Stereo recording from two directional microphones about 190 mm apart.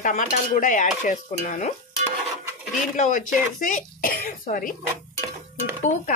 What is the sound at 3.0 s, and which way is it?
Speech, 40° left (ahead or behind).